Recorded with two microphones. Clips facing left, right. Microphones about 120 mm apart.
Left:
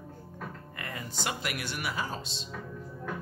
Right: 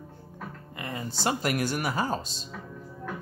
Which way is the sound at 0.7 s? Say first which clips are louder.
Right 4 dB; 25° right (ahead or behind).